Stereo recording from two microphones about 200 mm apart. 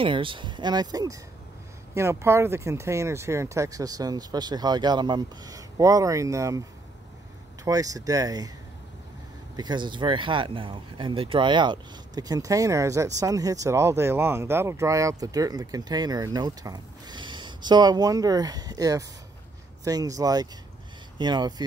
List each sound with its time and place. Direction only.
0.0 s speech: 25° right (ahead or behind)
7.6 s speech: 15° right (ahead or behind)
9.6 s speech: 20° right (ahead or behind)